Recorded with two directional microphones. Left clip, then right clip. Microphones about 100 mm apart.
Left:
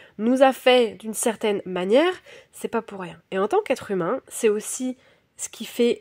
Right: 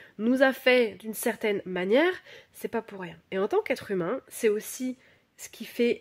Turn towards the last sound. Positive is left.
turn(degrees=50)  # may be behind; listen again after turning